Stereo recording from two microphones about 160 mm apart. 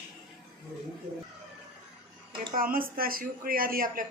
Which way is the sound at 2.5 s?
60° right (ahead or behind).